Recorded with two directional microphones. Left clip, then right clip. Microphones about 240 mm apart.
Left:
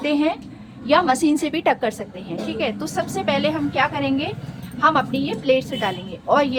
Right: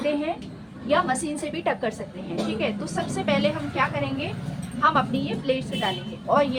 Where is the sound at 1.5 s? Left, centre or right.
Left.